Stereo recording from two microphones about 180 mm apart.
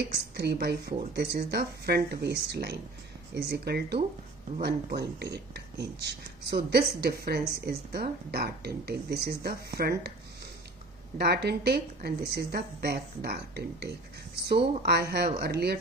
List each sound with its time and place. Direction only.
0.1 s speech: 65° right (ahead or behind)
11.1 s speech: 65° right (ahead or behind)